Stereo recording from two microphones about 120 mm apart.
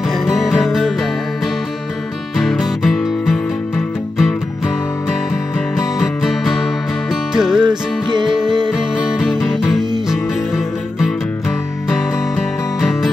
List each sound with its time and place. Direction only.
0.2 s music: centre (ahead or behind)
2.3 s music: centre (ahead or behind)
5.9 s music: centre (ahead or behind)
7.6 s music: 35° right (ahead or behind)
8.7 s music: 5° right (ahead or behind)